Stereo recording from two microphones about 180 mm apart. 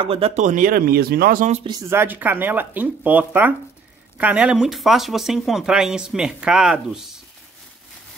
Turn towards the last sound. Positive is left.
turn(degrees=0)  # may be behind; listen again after turning